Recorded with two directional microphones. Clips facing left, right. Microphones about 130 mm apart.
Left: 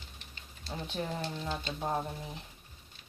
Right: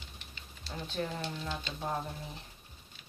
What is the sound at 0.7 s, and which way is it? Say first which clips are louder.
Speech: even; 15° left (ahead or behind).